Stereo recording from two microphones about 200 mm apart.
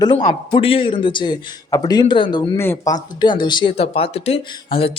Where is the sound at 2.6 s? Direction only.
10° left (ahead or behind).